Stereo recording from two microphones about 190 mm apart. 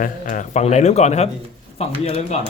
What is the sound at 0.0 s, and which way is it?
Speech, 40° left (ahead or behind).